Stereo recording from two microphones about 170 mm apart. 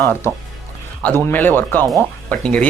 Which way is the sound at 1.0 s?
10° left (ahead or behind).